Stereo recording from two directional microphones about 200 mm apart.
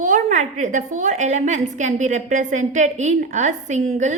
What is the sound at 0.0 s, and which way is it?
A woman's voice, 40° right (ahead or behind).